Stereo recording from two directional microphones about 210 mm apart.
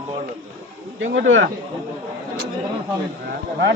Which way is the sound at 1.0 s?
60° right (ahead or behind).